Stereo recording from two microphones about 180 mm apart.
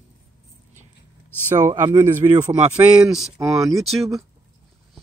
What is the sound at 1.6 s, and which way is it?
Speech, 20° right (ahead or behind).